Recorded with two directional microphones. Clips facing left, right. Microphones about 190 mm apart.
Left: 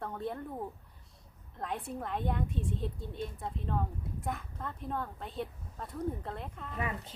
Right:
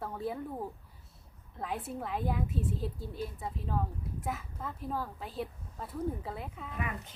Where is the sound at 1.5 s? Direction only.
5° right (ahead or behind).